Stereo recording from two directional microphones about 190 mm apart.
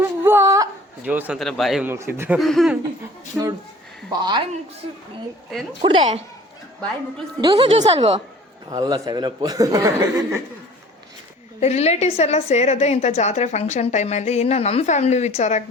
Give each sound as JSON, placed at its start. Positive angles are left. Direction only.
{"t": 0.0, "sound": "a sound", "side_deg": -10}
{"t": 1.9, "sound": "speech", "side_deg": -10}
{"t": 2.4, "sound": "speech", "side_deg": 0}
{"t": 4.2, "sound": "speech", "side_deg": -25}
{"t": 5.8, "sound": "speech", "side_deg": -30}
{"t": 7.4, "sound": "speech", "side_deg": -20}
{"t": 7.7, "sound": "a woman's voice", "side_deg": -30}
{"t": 11.6, "sound": "a woman's voice", "side_deg": 35}